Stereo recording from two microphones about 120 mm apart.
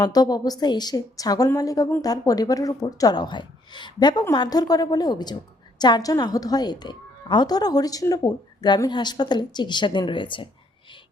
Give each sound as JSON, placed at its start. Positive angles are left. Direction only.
{"t": 0.0, "sound": "a woman's voice", "side_deg": 35}